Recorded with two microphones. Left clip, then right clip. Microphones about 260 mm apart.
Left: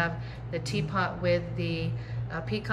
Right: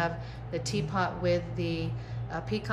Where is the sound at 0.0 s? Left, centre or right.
Centre.